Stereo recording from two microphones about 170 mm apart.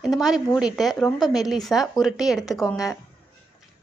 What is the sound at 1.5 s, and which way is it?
Speech, centre (ahead or behind).